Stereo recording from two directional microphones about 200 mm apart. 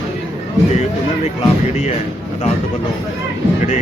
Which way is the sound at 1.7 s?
35° left (ahead or behind).